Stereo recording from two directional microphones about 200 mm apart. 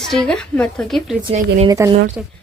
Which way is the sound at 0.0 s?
5° left (ahead or behind).